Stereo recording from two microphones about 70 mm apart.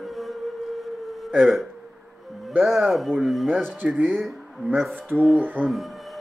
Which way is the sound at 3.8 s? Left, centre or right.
Right.